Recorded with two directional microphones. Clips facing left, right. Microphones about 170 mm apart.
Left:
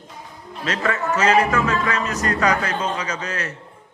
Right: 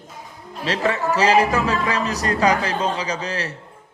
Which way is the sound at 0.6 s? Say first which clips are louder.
Right 2 dB; 30° right (ahead or behind).